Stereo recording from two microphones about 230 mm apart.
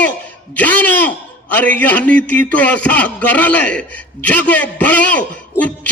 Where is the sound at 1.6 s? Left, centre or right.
Centre.